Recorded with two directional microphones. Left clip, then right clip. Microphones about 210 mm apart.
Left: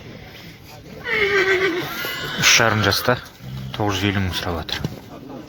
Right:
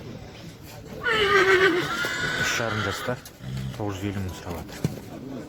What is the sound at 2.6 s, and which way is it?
Speech, 20° left (ahead or behind).